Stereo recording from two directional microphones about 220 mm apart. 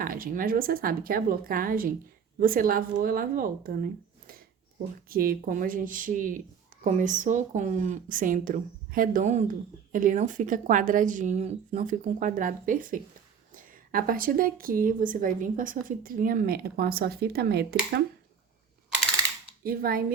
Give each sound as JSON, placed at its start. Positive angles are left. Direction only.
{"t": 0.0, "sound": "speech", "side_deg": -40}
{"t": 5.0, "sound": "speech", "side_deg": -40}
{"t": 19.6, "sound": "speech", "side_deg": -40}